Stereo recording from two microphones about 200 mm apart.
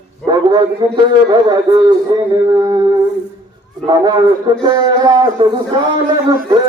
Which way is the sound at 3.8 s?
20° right (ahead or behind).